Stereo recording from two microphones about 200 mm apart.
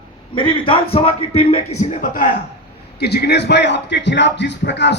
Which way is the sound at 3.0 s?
55° left (ahead or behind).